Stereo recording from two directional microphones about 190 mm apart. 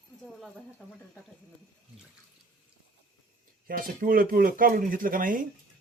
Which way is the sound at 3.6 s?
50° right (ahead or behind).